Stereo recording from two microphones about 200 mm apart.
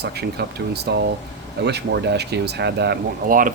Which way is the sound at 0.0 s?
55° right (ahead or behind).